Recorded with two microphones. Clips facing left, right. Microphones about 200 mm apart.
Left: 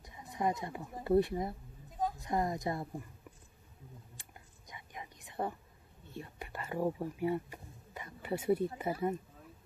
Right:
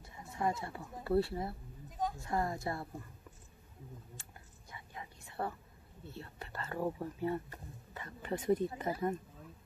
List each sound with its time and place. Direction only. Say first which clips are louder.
0.0 s a woman's voice: left 1 dB; 15° left (ahead or behind)
4.2 s whispering: even; 15° left (ahead or behind)
6.1 s a woman's voice: left 2 dB; 15° left (ahead or behind)